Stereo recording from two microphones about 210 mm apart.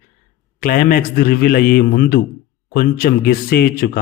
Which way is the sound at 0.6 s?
40° left (ahead or behind).